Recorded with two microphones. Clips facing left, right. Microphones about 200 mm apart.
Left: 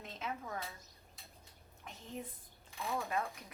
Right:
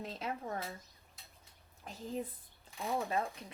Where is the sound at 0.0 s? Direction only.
35° right (ahead or behind).